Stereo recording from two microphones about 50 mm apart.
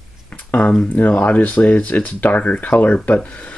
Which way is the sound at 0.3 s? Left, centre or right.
Left.